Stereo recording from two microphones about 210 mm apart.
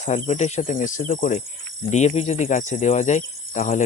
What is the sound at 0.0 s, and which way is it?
Speech, 35° left (ahead or behind).